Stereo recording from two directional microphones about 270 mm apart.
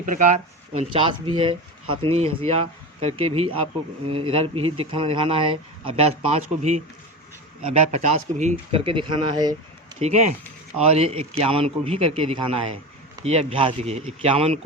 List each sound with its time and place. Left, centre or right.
0.0 s speech: right
0.8 s speech: centre
10.0 s speech: right